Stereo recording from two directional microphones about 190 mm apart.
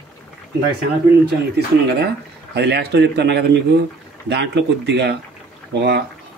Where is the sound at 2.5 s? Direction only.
60° right (ahead or behind).